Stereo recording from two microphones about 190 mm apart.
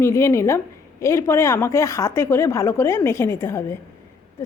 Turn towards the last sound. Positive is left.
turn(degrees=15)  # may be behind; listen again after turning